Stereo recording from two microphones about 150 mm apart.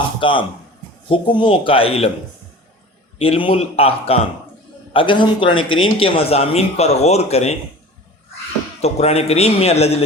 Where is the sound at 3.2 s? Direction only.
35° left (ahead or behind).